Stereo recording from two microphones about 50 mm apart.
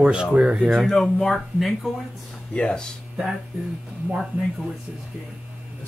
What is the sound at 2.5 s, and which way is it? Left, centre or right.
Speech, centre.